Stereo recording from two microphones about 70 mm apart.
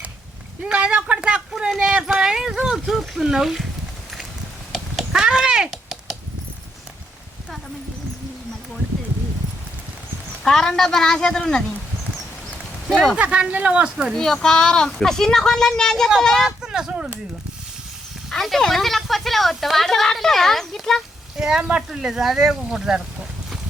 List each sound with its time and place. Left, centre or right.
0.6 s a sound: centre
1.8 s speech: centre
4.7 s a sound: centre
5.2 s a sound: centre
10.4 s speech: centre
13.1 s speech: centre
13.9 s speech: centre
14.2 s speech: centre
16.5 s speech: centre
18.3 s speech: centre
21.6 s speech: centre